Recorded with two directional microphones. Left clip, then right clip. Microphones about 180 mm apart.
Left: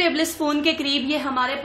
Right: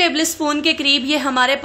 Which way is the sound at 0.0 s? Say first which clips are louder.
Right 4 dB; 20° right (ahead or behind).